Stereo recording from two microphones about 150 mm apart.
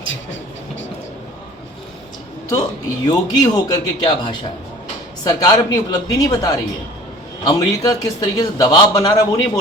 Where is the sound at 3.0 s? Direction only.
25° left (ahead or behind).